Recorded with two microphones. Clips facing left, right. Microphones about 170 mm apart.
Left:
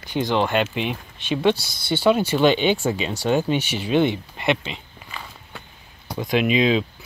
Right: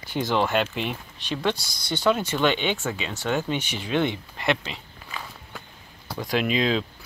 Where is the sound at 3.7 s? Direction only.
25° left (ahead or behind).